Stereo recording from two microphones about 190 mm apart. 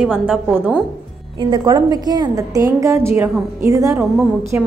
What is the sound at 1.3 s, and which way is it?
A woman's voice, 20° right (ahead or behind).